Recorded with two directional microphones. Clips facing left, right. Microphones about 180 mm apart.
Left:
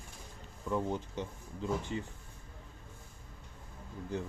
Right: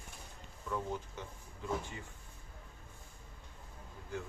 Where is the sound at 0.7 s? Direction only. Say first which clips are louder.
Left 5 dB; 20° left (ahead or behind).